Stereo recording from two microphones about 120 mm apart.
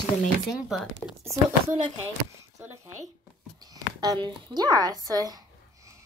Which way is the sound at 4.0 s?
35° right (ahead or behind).